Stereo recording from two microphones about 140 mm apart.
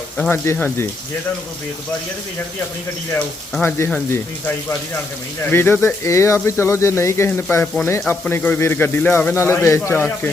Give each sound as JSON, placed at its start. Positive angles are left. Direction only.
{"t": 0.2, "sound": "speech", "side_deg": 15}
{"t": 3.6, "sound": "speech", "side_deg": 15}